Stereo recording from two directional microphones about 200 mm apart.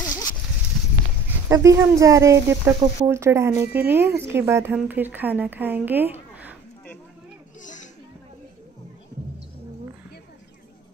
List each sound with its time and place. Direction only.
1.5 s speech: 15° right (ahead or behind)
7.6 s chatter: 40° left (ahead or behind)